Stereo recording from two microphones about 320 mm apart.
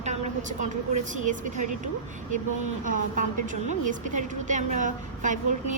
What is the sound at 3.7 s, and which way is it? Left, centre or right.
A woman's voice, right.